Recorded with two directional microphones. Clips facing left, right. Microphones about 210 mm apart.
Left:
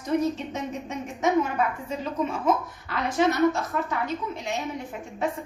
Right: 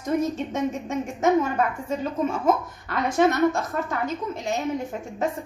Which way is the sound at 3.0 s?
50° right (ahead or behind).